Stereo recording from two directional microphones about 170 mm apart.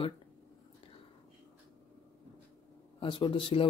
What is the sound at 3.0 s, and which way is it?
Speech, 30° left (ahead or behind).